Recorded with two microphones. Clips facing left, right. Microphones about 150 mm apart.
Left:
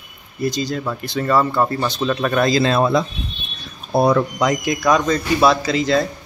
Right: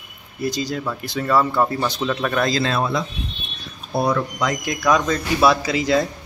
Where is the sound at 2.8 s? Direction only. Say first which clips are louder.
Left 6 dB; 40° left (ahead or behind).